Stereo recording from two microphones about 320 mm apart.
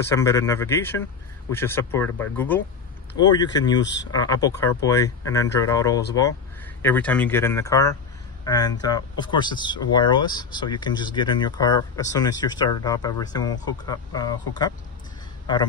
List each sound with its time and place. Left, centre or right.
0.1 s speech: centre
3.8 s speech: left
4.1 s speech: centre